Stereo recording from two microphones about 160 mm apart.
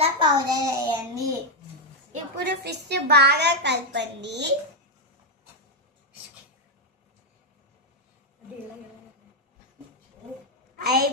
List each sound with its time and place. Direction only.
0.0 s child singing: 25° right (ahead or behind)
2.4 s a child's voice: 90° right
10.8 s a woman's voice: 75° right (ahead or behind)